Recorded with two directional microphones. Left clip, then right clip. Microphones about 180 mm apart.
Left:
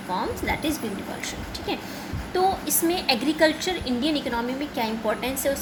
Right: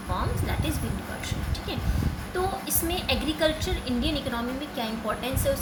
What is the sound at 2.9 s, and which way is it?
A woman's voice, 25° left (ahead or behind).